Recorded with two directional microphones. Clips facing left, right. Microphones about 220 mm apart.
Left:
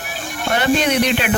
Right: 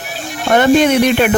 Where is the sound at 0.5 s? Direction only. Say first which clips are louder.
Right 7 dB; 50° right (ahead or behind).